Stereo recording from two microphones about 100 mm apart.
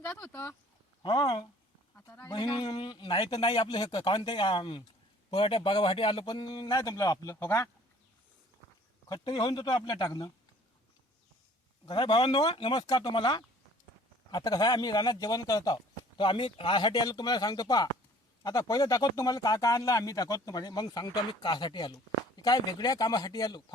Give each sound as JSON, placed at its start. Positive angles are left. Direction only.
{"t": 0.0, "sound": "speech", "side_deg": 15}
{"t": 1.0, "sound": "speech", "side_deg": 50}
{"t": 2.0, "sound": "speech", "side_deg": 25}
{"t": 2.3, "sound": "speech", "side_deg": 50}
{"t": 6.7, "sound": "speech", "side_deg": 35}
{"t": 9.0, "sound": "speech", "side_deg": 45}
{"t": 11.9, "sound": "speech", "side_deg": 55}